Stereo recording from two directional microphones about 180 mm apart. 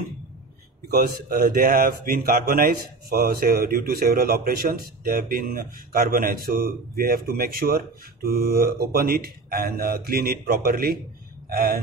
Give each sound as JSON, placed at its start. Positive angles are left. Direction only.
{"t": 0.8, "sound": "speech", "side_deg": -50}